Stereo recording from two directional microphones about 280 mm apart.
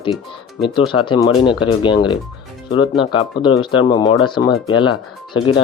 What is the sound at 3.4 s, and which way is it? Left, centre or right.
Speech, centre.